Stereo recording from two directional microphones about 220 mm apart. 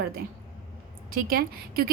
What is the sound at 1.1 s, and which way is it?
Speech, 40° right (ahead or behind).